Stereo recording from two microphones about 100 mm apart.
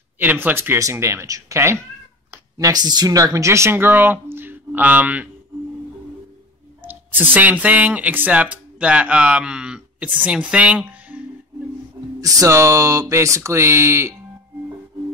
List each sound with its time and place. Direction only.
0.2 s speech: 20° right (ahead or behind)
2.5 s speech: 40° right (ahead or behind); by 5.3 s 15° right (ahead or behind)
6.8 s speech: 20° right (ahead or behind)
12.2 s speech: 35° right (ahead or behind)